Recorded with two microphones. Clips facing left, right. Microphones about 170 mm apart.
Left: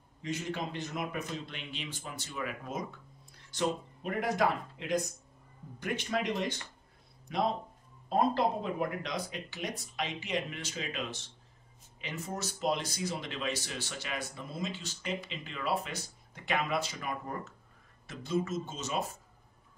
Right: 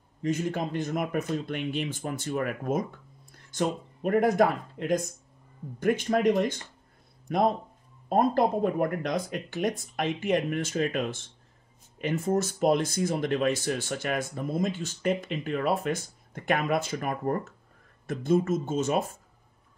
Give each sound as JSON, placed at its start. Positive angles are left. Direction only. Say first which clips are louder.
{"t": 0.2, "sound": "speech", "louder": "right 7 dB", "side_deg": -50}